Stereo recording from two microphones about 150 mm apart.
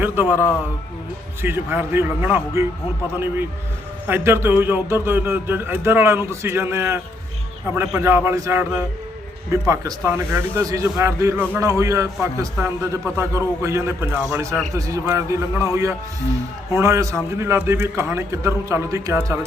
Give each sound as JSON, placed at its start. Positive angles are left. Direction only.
{"t": 0.0, "sound": "a man's voice", "side_deg": -15}
{"t": 4.0, "sound": "a man's voice", "side_deg": -15}
{"t": 9.6, "sound": "a man's voice", "side_deg": -20}